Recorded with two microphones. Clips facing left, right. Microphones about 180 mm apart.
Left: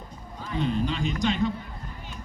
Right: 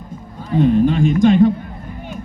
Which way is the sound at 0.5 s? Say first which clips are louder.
Right 13 dB; 50° right (ahead or behind).